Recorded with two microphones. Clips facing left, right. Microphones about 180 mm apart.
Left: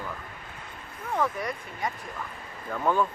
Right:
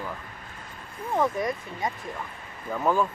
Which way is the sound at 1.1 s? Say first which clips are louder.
Right 3 dB; 20° right (ahead or behind).